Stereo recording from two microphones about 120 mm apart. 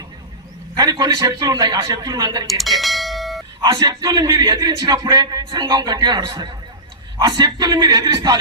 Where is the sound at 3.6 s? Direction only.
35° right (ahead or behind).